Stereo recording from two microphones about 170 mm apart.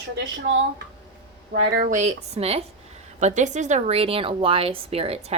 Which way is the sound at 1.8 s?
50° right (ahead or behind).